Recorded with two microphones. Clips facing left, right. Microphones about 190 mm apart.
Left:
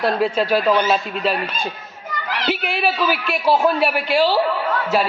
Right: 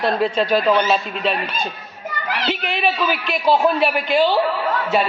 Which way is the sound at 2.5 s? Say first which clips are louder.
Left 1 dB; 10° left (ahead or behind).